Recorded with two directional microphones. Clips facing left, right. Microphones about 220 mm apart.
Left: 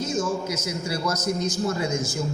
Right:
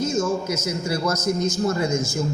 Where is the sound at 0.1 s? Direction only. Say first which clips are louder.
Right 3 dB; 45° right (ahead or behind).